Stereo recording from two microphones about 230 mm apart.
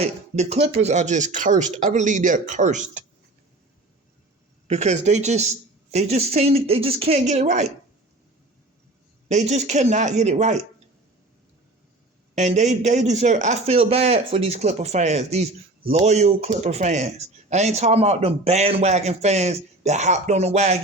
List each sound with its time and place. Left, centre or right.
0.0 s speech: right
4.7 s speech: right
9.3 s speech: right
12.3 s speech: right